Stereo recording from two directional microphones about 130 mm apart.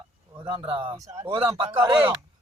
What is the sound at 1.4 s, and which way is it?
Speech, 45° right (ahead or behind).